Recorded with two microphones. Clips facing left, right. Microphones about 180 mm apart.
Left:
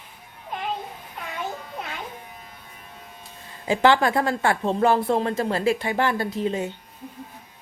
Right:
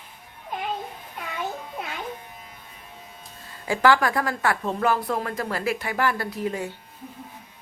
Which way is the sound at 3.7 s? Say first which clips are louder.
Left 2 dB; 25° left (ahead or behind).